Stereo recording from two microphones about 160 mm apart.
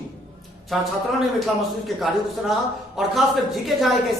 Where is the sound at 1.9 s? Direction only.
Centre (ahead or behind).